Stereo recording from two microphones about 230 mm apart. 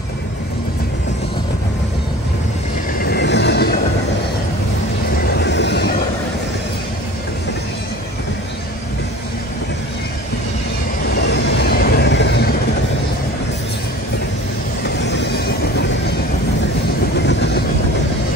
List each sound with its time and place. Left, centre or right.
3.0 s vehicle: left
5.3 s vehicle: left
11.2 s vehicle: left
15.0 s vehicle: left